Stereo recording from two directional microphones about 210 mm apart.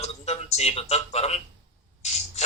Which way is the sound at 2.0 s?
30° left (ahead or behind).